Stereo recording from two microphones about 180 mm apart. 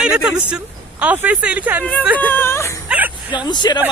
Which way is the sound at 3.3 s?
25° left (ahead or behind).